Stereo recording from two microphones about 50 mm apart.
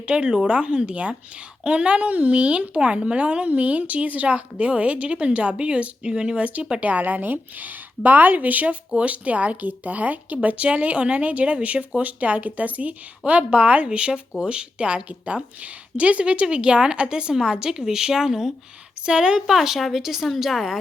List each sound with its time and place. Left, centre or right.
0.1 s a woman's voice: right
19.5 s a woman's voice: centre